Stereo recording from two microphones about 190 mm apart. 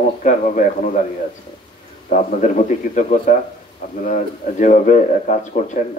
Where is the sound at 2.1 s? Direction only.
40° left (ahead or behind).